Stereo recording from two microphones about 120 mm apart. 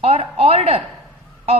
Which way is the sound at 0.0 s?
60° right (ahead or behind).